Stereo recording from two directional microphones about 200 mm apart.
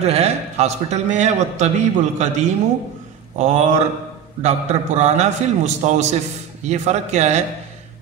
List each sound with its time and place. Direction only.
0.0 s a man's voice: 30° right (ahead or behind)